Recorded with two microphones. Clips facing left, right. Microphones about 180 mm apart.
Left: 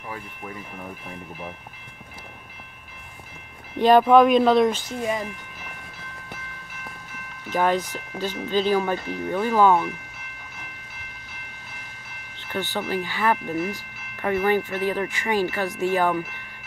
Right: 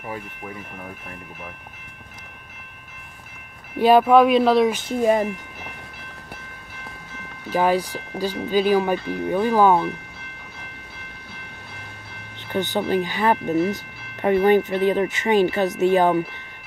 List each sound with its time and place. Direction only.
3.7 s speech: 5° right (ahead or behind)
5.0 s speech: 40° right (ahead or behind)
7.4 s speech: 10° right (ahead or behind)
12.4 s a sound: 20° right (ahead or behind)
12.9 s speech: 20° right (ahead or behind)